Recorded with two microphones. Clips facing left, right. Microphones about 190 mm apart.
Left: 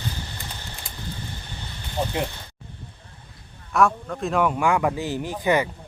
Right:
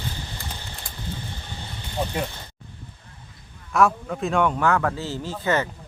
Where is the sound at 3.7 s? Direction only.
Centre (ahead or behind).